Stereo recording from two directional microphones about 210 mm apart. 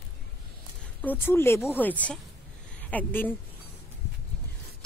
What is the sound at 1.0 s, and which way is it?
Speech, 10° left (ahead or behind).